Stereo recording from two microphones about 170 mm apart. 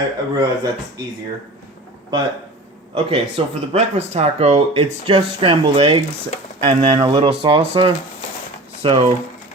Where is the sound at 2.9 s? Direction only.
35° right (ahead or behind).